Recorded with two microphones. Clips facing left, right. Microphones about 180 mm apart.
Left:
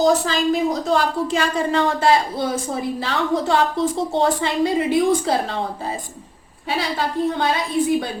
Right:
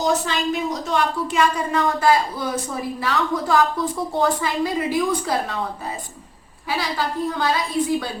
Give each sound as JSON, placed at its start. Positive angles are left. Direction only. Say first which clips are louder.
{"t": 0.0, "sound": "a woman's voice", "louder": "left 4 dB", "side_deg": 35}
{"t": 7.3, "sound": "a woman's voice", "louder": "left 2 dB", "side_deg": 25}